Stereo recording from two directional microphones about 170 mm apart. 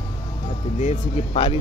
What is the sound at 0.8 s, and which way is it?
Speech, 40° left (ahead or behind).